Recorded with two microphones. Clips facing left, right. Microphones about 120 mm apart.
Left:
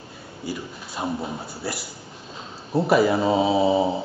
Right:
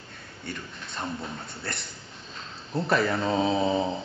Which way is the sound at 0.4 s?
5° left (ahead or behind).